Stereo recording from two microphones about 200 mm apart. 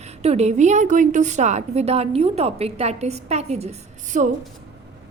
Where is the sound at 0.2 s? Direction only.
30° right (ahead or behind).